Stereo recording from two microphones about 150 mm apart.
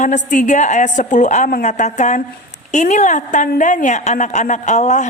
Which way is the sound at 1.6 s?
50° left (ahead or behind).